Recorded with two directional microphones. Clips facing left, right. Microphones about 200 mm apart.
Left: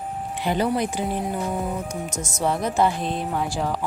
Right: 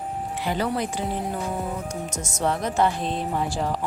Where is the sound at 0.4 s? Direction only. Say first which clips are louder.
Left 4 dB; 20° left (ahead or behind).